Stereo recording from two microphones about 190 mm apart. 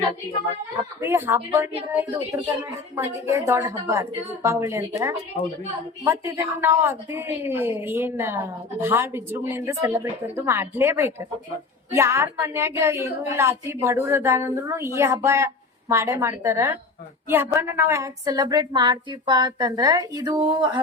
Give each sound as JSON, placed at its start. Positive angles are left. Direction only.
{"t": 1.0, "sound": "a woman's voice", "side_deg": -15}